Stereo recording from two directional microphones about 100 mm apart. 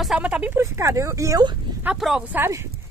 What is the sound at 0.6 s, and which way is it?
Speech, 30° right (ahead or behind).